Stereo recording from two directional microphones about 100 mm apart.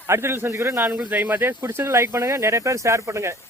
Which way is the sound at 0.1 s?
25° right (ahead or behind).